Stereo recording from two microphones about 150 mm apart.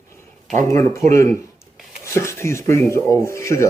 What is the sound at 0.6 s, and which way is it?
Speech, 20° left (ahead or behind).